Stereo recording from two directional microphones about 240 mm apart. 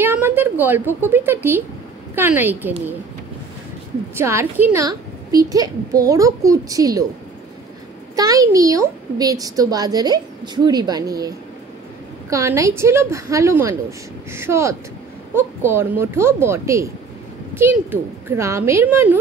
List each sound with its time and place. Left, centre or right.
0.0 s a woman's voice: centre
4.2 s a woman's voice: centre
8.2 s a child's voice: centre